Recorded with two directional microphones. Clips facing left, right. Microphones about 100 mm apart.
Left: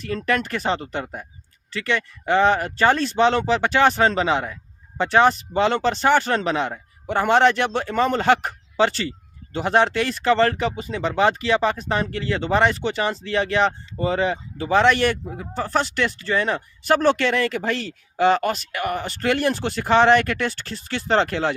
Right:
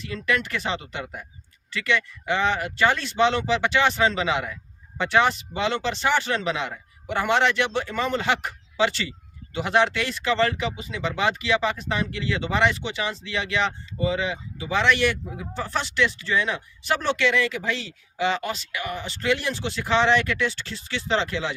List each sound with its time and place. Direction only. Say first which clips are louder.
0.3 s speech: left 3 dB; 40° left (ahead or behind)